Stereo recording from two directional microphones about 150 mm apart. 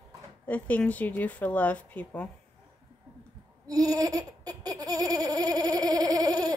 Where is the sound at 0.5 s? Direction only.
10° left (ahead or behind).